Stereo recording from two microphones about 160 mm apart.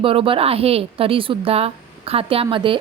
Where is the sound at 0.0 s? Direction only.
35° right (ahead or behind).